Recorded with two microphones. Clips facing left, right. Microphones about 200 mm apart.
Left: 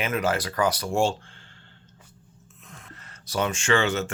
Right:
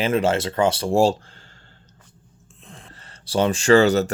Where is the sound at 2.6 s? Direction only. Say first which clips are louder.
Right 3 dB; 30° right (ahead or behind).